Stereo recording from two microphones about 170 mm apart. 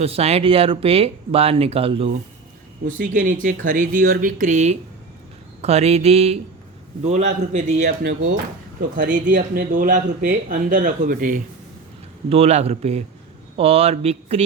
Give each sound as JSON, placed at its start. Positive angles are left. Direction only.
{"t": 0.0, "sound": "speech", "side_deg": -35}
{"t": 2.8, "sound": "speech", "side_deg": -50}
{"t": 12.3, "sound": "speech", "side_deg": -40}